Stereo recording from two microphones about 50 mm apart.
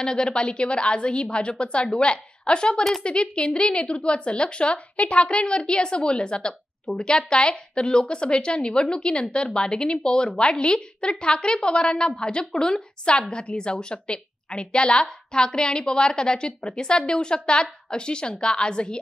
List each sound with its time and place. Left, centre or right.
0.0 s a woman's voice: centre